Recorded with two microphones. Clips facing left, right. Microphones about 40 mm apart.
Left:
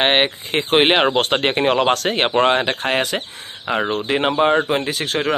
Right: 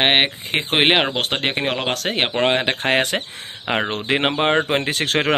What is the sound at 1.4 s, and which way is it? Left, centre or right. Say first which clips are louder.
Speech: left 5 dB; centre.